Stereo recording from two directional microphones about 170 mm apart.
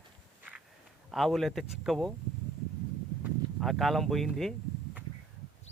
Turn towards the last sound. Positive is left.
turn(degrees=0)  # may be behind; listen again after turning